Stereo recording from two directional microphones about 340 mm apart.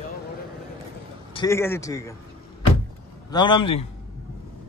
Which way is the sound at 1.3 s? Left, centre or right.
Centre.